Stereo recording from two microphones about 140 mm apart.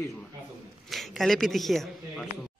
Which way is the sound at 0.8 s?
Centre (ahead or behind).